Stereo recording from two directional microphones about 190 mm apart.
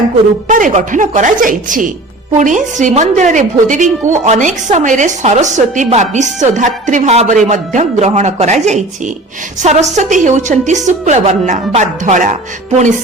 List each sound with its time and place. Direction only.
0.4 s a woman's voice: 45° right (ahead or behind)